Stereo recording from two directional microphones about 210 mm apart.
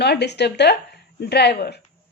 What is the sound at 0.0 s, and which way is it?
Speech, 50° left (ahead or behind).